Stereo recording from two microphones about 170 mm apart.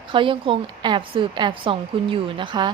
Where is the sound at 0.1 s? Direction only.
30° right (ahead or behind).